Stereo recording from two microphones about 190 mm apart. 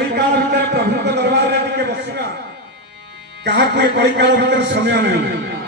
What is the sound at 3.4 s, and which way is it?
A man's voice, 65° right (ahead or behind).